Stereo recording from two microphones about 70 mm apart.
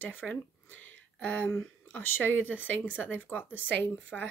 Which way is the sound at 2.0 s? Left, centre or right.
Left.